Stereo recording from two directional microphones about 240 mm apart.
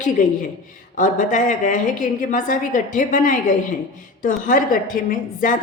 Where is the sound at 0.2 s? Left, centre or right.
Left.